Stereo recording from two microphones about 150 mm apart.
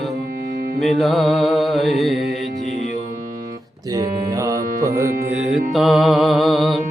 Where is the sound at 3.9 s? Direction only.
25° right (ahead or behind).